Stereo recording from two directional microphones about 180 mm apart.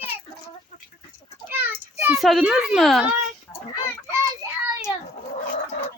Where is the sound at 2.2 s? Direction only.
Centre (ahead or behind).